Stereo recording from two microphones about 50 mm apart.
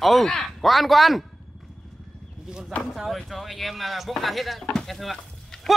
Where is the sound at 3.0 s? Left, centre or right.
Centre.